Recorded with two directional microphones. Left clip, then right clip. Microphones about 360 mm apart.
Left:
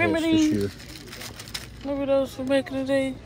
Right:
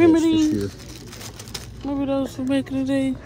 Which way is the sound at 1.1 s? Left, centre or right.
Right.